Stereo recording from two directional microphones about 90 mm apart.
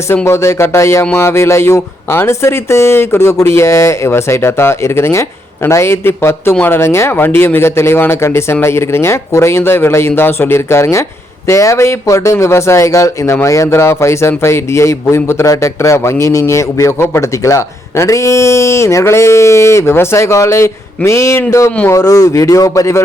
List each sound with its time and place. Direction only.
0.3 s speech: 30° left (ahead or behind)